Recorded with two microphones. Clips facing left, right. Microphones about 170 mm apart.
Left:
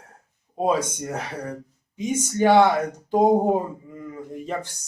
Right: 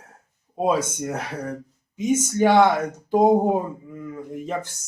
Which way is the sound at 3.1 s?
5° right (ahead or behind).